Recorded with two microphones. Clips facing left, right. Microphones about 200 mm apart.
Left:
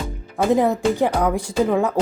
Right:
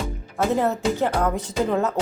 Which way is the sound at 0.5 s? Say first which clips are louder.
Left 5 dB; 15° left (ahead or behind).